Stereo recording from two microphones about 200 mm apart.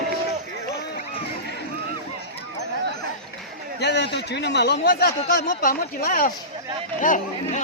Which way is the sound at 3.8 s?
55° left (ahead or behind).